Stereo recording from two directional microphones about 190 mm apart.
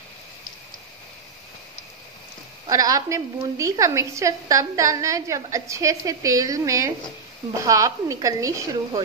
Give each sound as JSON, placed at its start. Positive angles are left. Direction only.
{"t": 2.7, "sound": "a woman's voice", "side_deg": -20}